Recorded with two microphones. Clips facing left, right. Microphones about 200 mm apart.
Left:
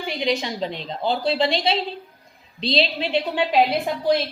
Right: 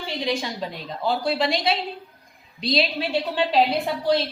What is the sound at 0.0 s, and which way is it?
A woman's voice, 15° left (ahead or behind).